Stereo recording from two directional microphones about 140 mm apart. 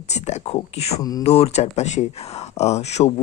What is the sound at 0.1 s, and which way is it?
Speech, 50° left (ahead or behind).